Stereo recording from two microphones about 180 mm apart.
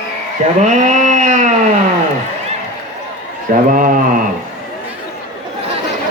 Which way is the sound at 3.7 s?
50° right (ahead or behind).